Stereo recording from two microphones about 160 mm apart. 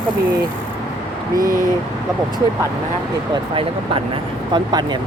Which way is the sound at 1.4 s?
60° right (ahead or behind).